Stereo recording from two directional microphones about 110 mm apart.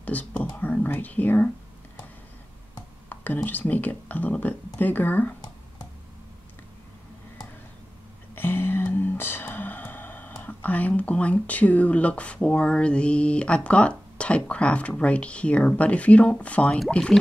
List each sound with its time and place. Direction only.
0.0 s whispering: 15° left (ahead or behind)
0.6 s speech: 15° left (ahead or behind)
3.1 s speech: 15° left (ahead or behind)
8.4 s speech: 20° left (ahead or behind)